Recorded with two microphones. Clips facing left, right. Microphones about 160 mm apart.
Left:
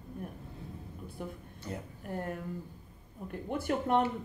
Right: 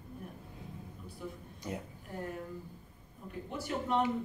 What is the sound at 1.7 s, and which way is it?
Speech, 15° right (ahead or behind).